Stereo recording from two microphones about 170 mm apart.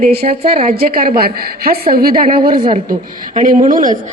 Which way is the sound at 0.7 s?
60° right (ahead or behind).